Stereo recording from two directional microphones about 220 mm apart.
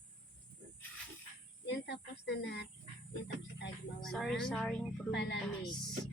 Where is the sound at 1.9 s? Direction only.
50° left (ahead or behind).